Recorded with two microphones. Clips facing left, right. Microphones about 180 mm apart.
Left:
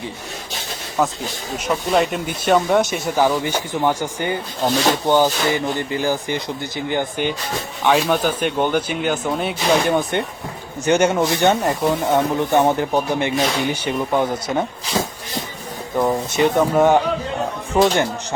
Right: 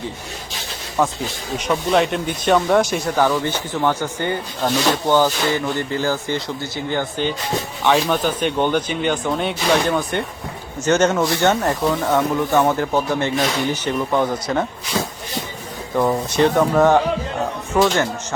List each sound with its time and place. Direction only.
1.0 s speech: centre (ahead or behind)
7.9 s speech: 5° left (ahead or behind)
9.9 s speech: 20° left (ahead or behind)
11.8 s speech: 25° left (ahead or behind)
16.0 s speech: 5° left (ahead or behind)